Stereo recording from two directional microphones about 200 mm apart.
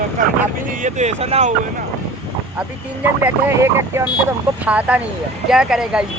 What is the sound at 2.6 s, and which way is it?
Speech, 10° right (ahead or behind).